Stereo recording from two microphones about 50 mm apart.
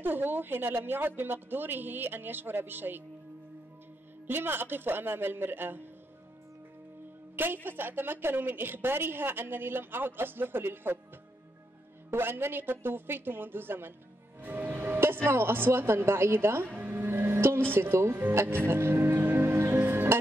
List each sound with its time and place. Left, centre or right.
0.0 s a woman's voice: right
4.3 s a woman's voice: right
7.3 s a woman's voice: right
12.1 s a woman's voice: right
14.4 s music: right
14.8 s a sound: right
15.2 s a woman's voice: right
16.7 s music: right